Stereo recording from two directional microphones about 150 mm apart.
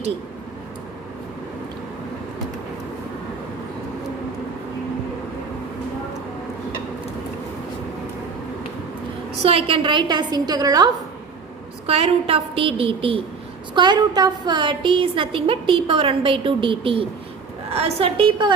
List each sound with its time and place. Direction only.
9.4 s a woman's voice: 40° right (ahead or behind); by 10.9 s 25° right (ahead or behind)
11.9 s a woman's voice: 40° right (ahead or behind)